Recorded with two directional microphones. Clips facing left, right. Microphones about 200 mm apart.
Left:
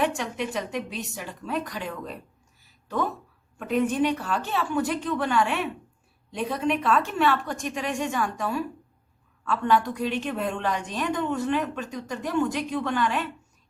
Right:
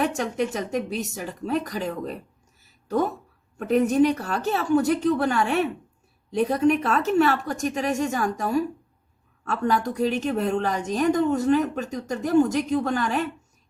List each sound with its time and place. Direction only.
0.0 s a woman's voice: 45° right (ahead or behind)
3.6 s a woman's voice: 40° right (ahead or behind)